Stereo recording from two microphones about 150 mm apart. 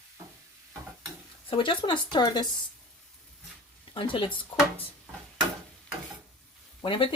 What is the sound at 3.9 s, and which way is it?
Speech, 35° left (ahead or behind).